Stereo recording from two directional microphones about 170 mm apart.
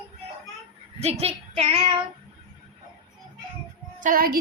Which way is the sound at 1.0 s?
35° right (ahead or behind).